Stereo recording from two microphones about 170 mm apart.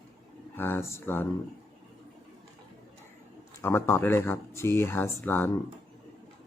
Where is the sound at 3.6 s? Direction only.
15° left (ahead or behind).